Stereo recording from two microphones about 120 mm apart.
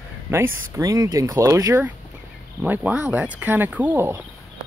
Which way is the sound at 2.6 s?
15° right (ahead or behind).